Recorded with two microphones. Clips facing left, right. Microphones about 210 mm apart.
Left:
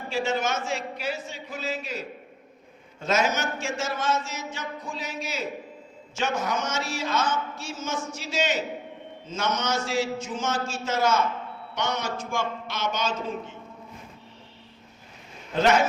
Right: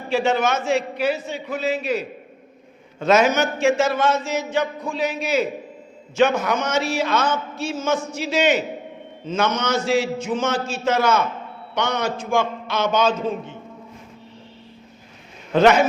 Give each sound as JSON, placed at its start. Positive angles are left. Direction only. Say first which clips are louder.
{"t": 0.1, "sound": "a man's voice", "louder": "right 7 dB", "side_deg": -65}
{"t": 15.5, "sound": "a man's voice", "louder": "right 6 dB", "side_deg": -65}